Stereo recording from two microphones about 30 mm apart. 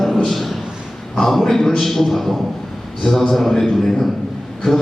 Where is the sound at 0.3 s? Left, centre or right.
Centre.